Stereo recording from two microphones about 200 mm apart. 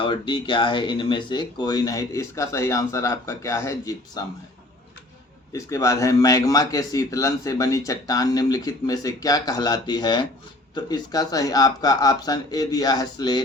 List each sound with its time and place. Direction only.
0.0 s speech: 25° left (ahead or behind)
5.5 s a man's voice: 15° left (ahead or behind)